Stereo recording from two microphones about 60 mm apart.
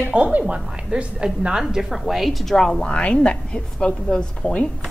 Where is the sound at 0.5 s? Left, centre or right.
Centre.